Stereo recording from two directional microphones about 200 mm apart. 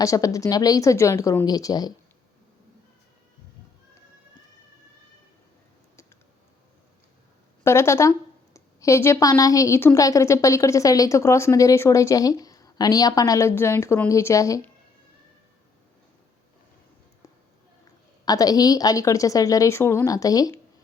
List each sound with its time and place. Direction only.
0.0 s a woman's voice: 15° left (ahead or behind)
7.6 s a woman's voice: 15° left (ahead or behind)
18.3 s a woman's voice: 20° left (ahead or behind)